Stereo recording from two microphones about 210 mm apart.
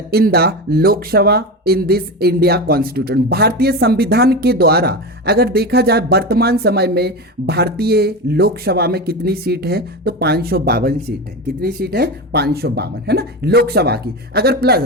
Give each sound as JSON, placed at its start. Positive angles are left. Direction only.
{"t": 0.1, "sound": "speech", "side_deg": -45}